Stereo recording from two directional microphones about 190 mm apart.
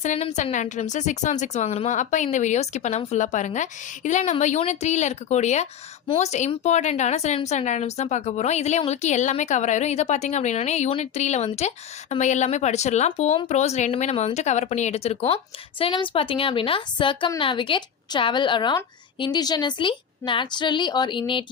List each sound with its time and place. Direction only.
0.0 s a woman's voice: 35° left (ahead or behind)